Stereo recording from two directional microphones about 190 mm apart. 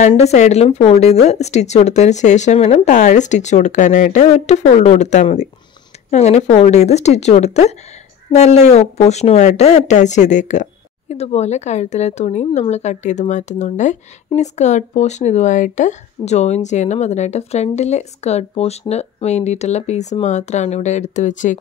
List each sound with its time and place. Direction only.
0.1 s speech: 35° left (ahead or behind)